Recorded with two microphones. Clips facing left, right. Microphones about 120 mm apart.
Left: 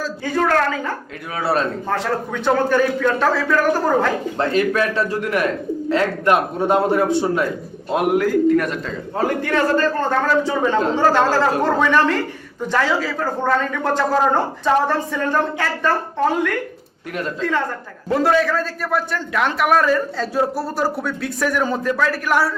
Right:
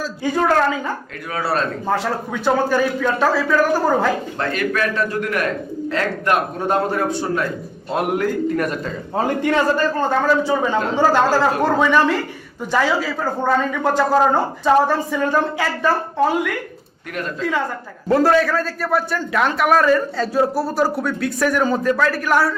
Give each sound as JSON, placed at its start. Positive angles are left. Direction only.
{"t": 0.0, "sound": "speech", "side_deg": -15}
{"t": 1.4, "sound": "a man's voice", "side_deg": 20}
{"t": 1.9, "sound": "a man's voice", "side_deg": -10}
{"t": 4.4, "sound": "a man's voice", "side_deg": 25}
{"t": 7.9, "sound": "a man's voice", "side_deg": 5}
{"t": 9.1, "sound": "a man's voice", "side_deg": -20}
{"t": 18.1, "sound": "a man's voice", "side_deg": 0}